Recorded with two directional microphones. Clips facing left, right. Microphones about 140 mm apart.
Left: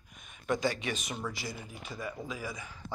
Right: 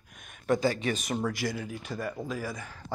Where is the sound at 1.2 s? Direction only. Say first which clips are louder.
Right 8 dB; 80° right; by 2.7 s 50° right (ahead or behind).